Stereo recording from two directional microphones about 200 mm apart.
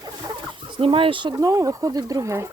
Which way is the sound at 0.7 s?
25° right (ahead or behind).